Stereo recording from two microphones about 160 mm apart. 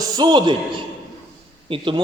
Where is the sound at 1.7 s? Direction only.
30° right (ahead or behind).